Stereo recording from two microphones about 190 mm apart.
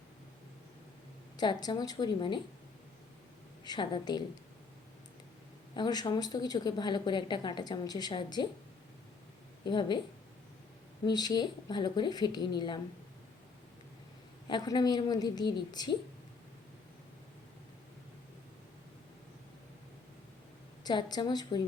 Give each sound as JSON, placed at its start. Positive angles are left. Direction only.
{"t": 1.4, "sound": "speech", "side_deg": 20}
{"t": 3.6, "sound": "speech", "side_deg": 25}
{"t": 5.7, "sound": "speech", "side_deg": 20}
{"t": 9.6, "sound": "speech", "side_deg": 25}
{"t": 11.0, "sound": "speech", "side_deg": 20}
{"t": 14.4, "sound": "speech", "side_deg": 20}
{"t": 20.8, "sound": "speech", "side_deg": 20}